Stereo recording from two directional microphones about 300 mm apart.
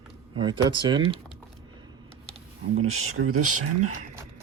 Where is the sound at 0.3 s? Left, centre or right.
Centre.